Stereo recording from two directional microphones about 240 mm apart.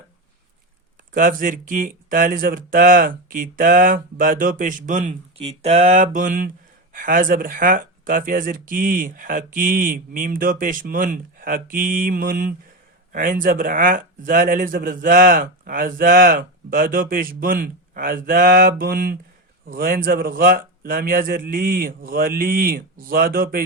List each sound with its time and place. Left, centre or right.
1.1 s speech: right